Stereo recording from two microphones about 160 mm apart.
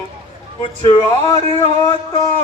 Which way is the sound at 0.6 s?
35° left (ahead or behind).